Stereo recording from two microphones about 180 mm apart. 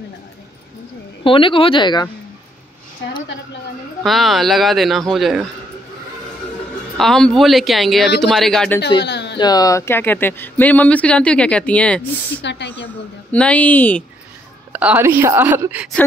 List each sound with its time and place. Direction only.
1.2 s speech: 30° left (ahead or behind)
4.0 s a man's voice: centre (ahead or behind)
7.0 s a man's voice: 5° left (ahead or behind)
9.0 s speech: 70° left (ahead or behind)
9.4 s speech: 20° left (ahead or behind)
12.4 s speech: 75° left (ahead or behind)
13.3 s speech: 5° left (ahead or behind)
14.7 s a woman's voice: 10° right (ahead or behind)